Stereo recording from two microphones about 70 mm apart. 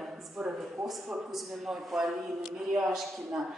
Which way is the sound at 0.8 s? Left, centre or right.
Centre.